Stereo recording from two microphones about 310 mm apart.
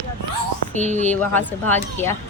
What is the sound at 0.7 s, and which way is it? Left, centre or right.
Speech, right.